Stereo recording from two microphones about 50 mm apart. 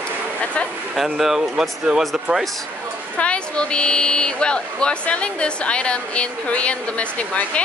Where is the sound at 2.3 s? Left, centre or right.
Right.